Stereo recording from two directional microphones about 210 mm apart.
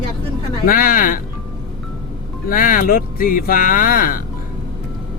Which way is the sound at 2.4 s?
40° left (ahead or behind).